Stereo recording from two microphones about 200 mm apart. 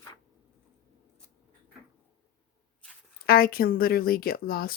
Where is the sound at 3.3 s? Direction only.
50° left (ahead or behind).